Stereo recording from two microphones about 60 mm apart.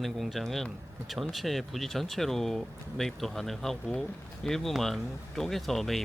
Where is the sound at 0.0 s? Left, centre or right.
Centre.